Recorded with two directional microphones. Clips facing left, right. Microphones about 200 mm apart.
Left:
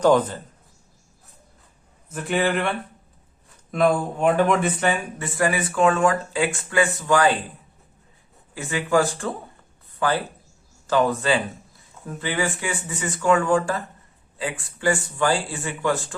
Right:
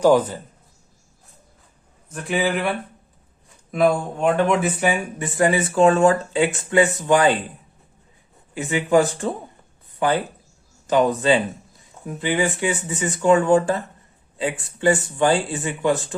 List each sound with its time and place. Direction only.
0.0 s a man's voice: 10° right (ahead or behind)
2.0 s speech: centre (ahead or behind); by 7.3 s 20° right (ahead or behind)
8.5 s speech: 20° right (ahead or behind)